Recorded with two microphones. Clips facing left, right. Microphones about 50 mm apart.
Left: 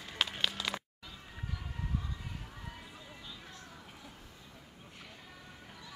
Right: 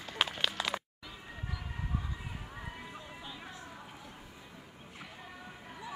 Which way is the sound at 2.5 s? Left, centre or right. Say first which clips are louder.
Right 4 dB; centre.